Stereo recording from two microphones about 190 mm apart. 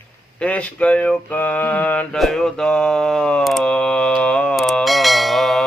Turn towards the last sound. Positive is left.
turn(degrees=0)  # may be behind; listen again after turning